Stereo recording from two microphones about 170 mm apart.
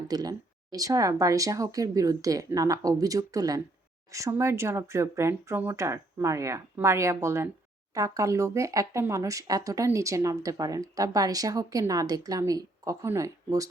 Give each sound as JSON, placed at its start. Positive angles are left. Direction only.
{"t": 0.1, "sound": "speech", "side_deg": -20}